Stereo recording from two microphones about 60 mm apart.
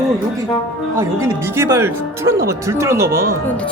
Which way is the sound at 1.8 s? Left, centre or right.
Right.